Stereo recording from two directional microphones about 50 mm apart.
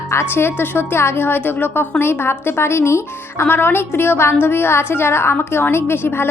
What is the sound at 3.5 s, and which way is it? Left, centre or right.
A woman's voice, left.